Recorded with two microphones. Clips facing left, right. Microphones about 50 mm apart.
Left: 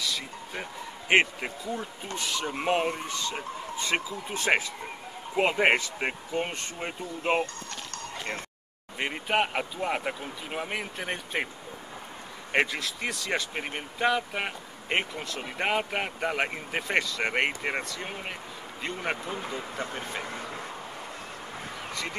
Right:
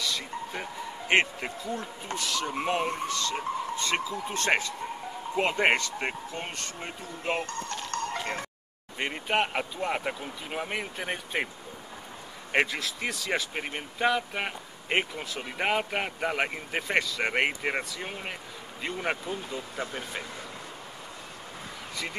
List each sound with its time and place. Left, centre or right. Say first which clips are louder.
0.0 s speech: right 1 dB; centre
2.1 s speech: even; left
2.4 s speech: left 3 dB; centre
7.9 s a sound: right 7 dB; right
8.9 s speech: left 1 dB; centre
12.5 s speech: even; centre
19.3 s speech: left 1 dB; left
19.8 s speech: even; centre